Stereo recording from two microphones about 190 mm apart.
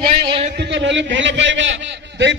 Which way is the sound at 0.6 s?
70° right (ahead or behind).